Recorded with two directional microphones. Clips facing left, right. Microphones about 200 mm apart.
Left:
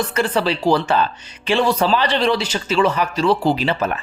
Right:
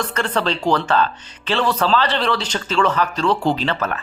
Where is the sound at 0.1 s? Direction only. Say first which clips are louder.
Left 2 dB; 10° left (ahead or behind).